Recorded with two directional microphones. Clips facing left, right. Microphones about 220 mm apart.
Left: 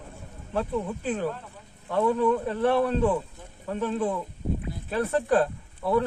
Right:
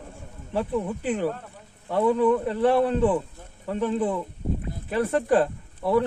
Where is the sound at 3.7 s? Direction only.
15° right (ahead or behind).